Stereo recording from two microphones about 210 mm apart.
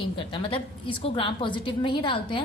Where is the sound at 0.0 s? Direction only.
25° left (ahead or behind).